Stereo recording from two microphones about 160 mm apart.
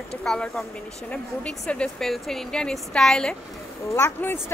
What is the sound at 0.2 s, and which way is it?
Speech, 5° left (ahead or behind).